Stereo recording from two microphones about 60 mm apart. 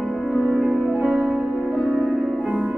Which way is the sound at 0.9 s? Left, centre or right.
Centre.